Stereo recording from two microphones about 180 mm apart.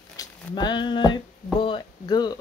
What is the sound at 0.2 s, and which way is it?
Speech, 25° left (ahead or behind).